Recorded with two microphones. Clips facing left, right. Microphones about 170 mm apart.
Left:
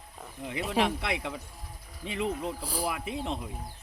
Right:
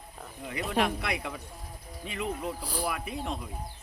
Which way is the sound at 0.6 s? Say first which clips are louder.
Even; 5° left (ahead or behind).